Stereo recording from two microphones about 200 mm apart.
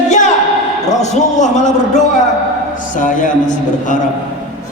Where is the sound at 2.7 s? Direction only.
40° left (ahead or behind).